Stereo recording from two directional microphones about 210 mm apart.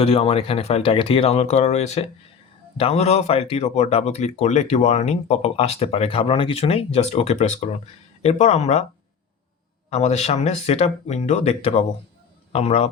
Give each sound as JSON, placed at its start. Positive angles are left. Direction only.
{"t": 0.0, "sound": "speech", "side_deg": 25}
{"t": 9.9, "sound": "speech", "side_deg": 30}